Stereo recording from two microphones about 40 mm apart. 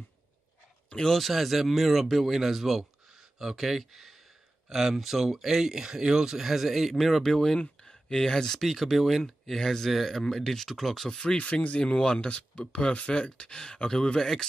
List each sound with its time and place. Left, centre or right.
0.9 s speech: centre
1.2 s speech: centre
7.3 s speech: centre
7.8 s a sound: centre
8.5 s speech: centre
11.1 s speech: left
13.1 s speech: left